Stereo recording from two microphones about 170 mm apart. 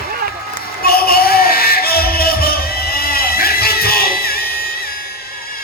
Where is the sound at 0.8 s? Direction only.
65° left (ahead or behind).